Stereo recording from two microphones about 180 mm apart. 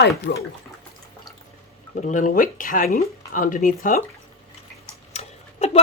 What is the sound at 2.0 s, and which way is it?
Speech, 45° left (ahead or behind).